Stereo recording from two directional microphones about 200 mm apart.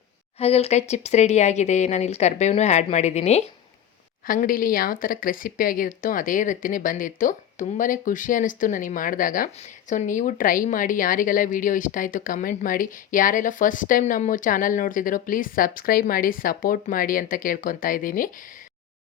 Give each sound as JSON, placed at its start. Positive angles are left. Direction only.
{"t": 0.3, "sound": "speech", "side_deg": 30}
{"t": 4.3, "sound": "speech", "side_deg": 45}